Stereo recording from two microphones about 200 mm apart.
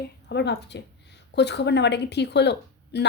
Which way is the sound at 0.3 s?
55° left (ahead or behind).